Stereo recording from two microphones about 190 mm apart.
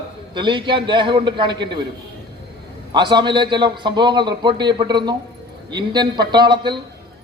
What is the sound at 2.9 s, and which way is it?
A man's voice, 25° right (ahead or behind).